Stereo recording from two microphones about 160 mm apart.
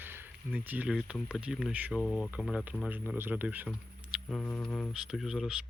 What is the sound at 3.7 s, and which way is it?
Speech, centre (ahead or behind).